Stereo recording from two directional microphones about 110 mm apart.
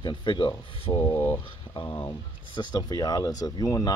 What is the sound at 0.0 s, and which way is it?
Speech, 45° left (ahead or behind).